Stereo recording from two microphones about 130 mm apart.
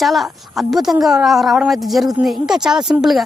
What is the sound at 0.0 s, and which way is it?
Speech, centre (ahead or behind).